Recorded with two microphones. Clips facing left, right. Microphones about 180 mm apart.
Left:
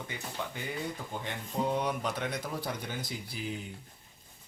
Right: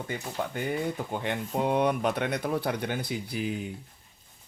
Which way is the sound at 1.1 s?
65° right (ahead or behind).